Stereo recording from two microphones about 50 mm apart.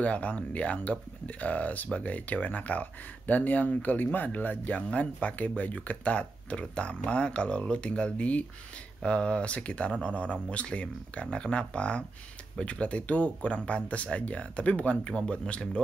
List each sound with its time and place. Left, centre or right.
0.0 s speech: left